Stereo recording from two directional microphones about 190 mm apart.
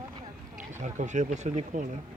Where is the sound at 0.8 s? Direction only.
40° right (ahead or behind).